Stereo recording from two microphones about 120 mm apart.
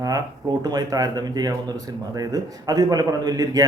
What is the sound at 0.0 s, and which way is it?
Speech, 35° right (ahead or behind).